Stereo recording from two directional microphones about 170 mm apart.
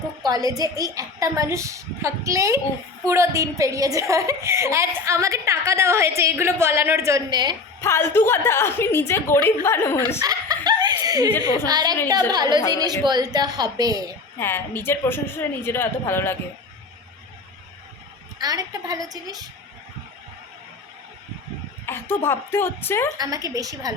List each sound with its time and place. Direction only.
0.3 s a woman's voice: 20° right (ahead or behind)
7.8 s a woman's voice: 15° left (ahead or behind)
10.2 s snicker: 20° right (ahead or behind)
11.5 s a woman's voice: 20° right (ahead or behind)
14.3 s a woman's voice: 10° left (ahead or behind)
18.3 s a woman's voice: 20° right (ahead or behind)
21.8 s a woman's voice: 15° left (ahead or behind)
23.1 s a woman's voice: 20° right (ahead or behind)